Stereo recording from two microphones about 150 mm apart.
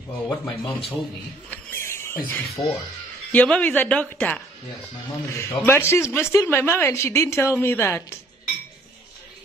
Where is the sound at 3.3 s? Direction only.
10° left (ahead or behind).